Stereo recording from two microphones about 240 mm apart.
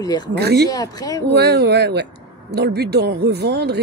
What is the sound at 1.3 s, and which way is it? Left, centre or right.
Speech, right.